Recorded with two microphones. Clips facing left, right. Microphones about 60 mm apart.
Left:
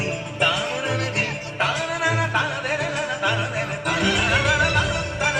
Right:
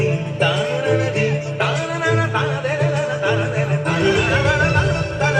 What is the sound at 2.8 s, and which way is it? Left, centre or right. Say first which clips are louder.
Music: right 4 dB; right.